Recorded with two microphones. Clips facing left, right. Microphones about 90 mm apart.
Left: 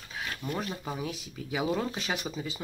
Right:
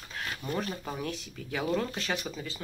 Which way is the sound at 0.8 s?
5° left (ahead or behind).